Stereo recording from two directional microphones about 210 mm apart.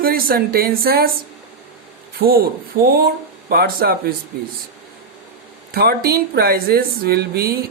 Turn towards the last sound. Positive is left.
turn(degrees=-45)  # may be behind; listen again after turning